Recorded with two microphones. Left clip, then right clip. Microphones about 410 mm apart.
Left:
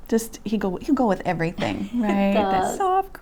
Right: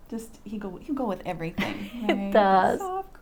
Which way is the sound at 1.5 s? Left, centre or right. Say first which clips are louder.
Left 6 dB; right.